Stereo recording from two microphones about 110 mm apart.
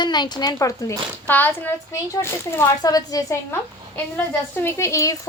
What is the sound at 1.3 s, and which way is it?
A child's voice, 15° left (ahead or behind).